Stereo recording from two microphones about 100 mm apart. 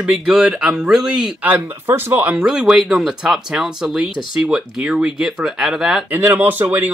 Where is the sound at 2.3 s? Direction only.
10° right (ahead or behind).